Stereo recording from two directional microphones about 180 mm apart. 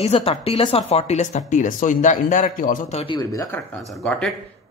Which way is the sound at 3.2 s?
20° left (ahead or behind).